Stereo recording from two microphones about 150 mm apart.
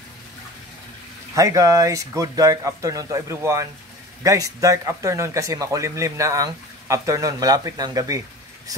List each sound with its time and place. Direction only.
1.3 s speech: 20° right (ahead or behind)